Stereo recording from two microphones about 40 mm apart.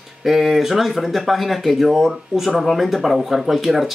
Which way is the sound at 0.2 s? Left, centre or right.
Centre.